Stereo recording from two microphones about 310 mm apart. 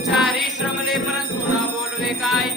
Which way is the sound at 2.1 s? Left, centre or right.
Centre.